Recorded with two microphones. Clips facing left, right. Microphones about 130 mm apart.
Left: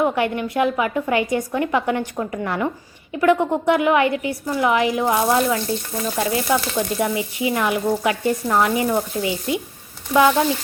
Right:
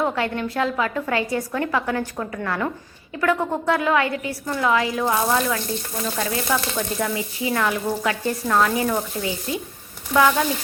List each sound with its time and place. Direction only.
0.0 s speech: 15° left (ahead or behind)